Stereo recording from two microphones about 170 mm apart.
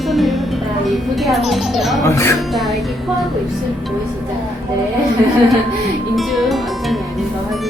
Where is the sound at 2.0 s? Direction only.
15° left (ahead or behind).